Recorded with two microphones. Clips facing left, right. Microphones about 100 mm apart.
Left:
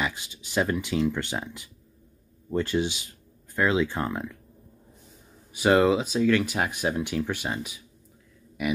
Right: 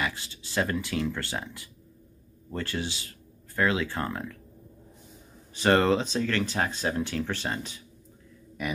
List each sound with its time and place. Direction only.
0.0 s speech: 15° left (ahead or behind)
5.5 s speech: 10° left (ahead or behind)